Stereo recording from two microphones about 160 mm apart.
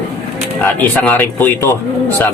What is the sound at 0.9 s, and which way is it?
Speech, 10° left (ahead or behind).